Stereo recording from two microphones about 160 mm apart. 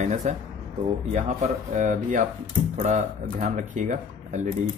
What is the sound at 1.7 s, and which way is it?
Speech, 50° right (ahead or behind).